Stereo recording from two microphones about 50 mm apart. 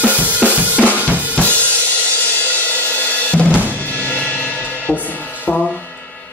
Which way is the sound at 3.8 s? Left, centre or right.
Left.